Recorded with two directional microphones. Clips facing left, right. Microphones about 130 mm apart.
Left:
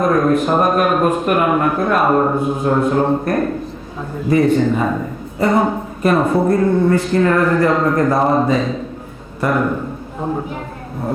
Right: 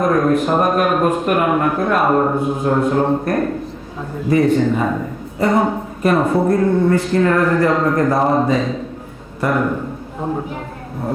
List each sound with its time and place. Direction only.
0.0 s a man's voice: 25° left (ahead or behind)